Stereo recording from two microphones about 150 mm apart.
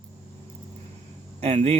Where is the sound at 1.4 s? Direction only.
45° right (ahead or behind).